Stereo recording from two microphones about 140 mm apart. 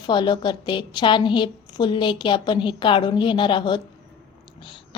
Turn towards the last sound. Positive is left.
turn(degrees=35)  # may be behind; listen again after turning